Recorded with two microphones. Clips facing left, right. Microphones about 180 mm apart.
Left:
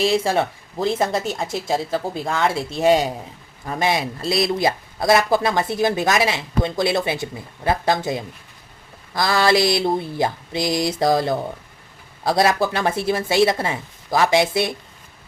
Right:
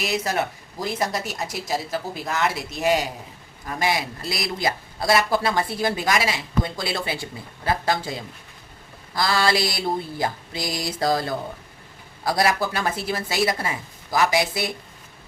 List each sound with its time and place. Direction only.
0.0 s speech: 30° left (ahead or behind)